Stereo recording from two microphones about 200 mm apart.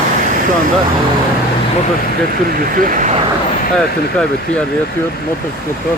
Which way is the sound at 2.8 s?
40° right (ahead or behind).